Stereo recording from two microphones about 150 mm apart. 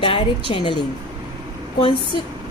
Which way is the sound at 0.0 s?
35° left (ahead or behind).